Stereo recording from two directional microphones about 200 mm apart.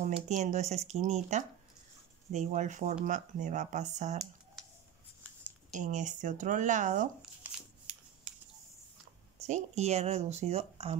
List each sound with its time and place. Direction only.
0.0 s speech: 35° right (ahead or behind)
5.7 s speech: 40° right (ahead or behind)
7.2 s a sound: 5° right (ahead or behind)
9.5 s speech: 35° right (ahead or behind)